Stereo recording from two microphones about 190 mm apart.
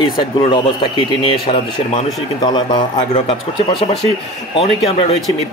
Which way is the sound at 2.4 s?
20° left (ahead or behind).